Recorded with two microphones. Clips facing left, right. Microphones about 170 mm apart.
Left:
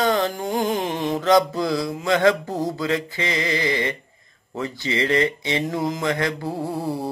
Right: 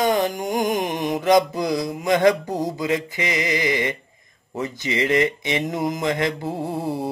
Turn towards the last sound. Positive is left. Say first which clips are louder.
# even
turn(degrees=-20)  # may be behind; listen again after turning